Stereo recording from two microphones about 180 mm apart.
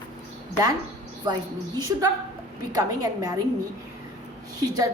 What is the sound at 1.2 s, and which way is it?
Speech, 25° right (ahead or behind).